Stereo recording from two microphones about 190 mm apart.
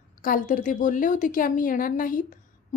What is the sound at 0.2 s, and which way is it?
A woman's voice, 45° left (ahead or behind).